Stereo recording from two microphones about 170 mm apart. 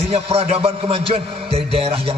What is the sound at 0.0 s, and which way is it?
Music, 35° right (ahead or behind).